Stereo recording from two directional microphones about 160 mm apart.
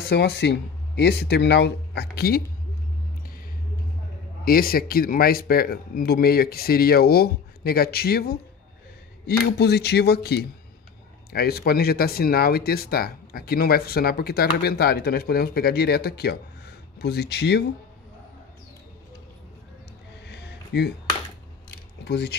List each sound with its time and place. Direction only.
0.0 s speech: 90° left
4.5 s speech: 65° left (ahead or behind)
9.2 s speech: 90° left
11.3 s speech: 80° left
20.2 s a sound: 90° left
22.0 s speech: 90° left